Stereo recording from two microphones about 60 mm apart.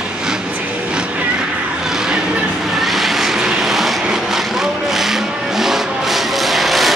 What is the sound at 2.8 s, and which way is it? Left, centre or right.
Vehicle, centre.